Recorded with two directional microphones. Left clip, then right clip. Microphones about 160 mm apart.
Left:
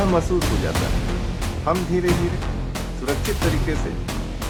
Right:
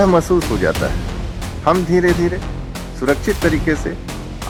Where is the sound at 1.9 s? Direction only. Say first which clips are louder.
Right 7 dB; 60° right (ahead or behind).